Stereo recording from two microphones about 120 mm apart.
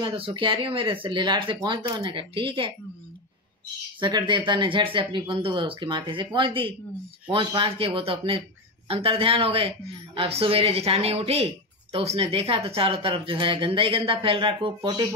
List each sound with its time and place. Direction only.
0.0 s speech: 45° right (ahead or behind)
4.0 s speech: 40° right (ahead or behind)